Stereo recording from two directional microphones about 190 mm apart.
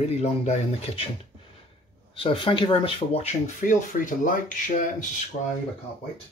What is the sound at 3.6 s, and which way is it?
Speech, 45° left (ahead or behind).